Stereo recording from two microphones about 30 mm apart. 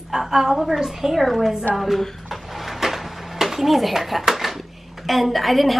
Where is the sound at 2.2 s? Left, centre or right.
Centre.